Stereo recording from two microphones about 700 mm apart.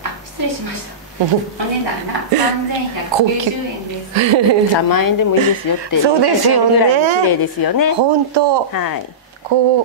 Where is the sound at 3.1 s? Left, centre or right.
Right.